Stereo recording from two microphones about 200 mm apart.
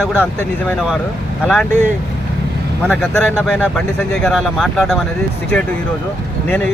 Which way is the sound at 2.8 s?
Centre (ahead or behind).